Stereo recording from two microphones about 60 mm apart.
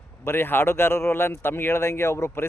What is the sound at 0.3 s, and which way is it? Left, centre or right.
A man's voice, left.